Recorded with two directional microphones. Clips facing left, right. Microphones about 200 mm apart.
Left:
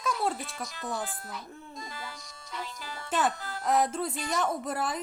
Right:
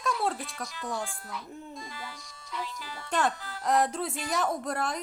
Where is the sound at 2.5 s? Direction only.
45° left (ahead or behind).